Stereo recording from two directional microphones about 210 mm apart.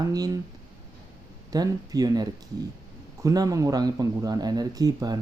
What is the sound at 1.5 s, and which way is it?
Speech, 15° right (ahead or behind).